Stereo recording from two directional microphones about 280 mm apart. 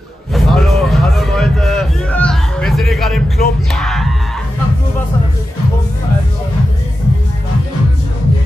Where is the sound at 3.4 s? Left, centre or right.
Left.